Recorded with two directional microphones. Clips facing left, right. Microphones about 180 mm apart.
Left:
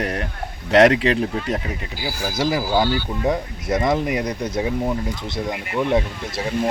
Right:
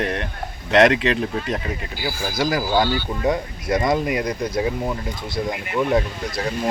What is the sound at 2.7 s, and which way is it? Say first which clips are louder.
Speech: even; 10° left (ahead or behind).